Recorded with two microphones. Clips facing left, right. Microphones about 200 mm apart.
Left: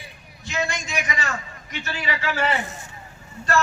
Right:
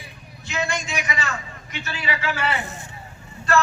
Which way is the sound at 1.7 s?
45° left (ahead or behind).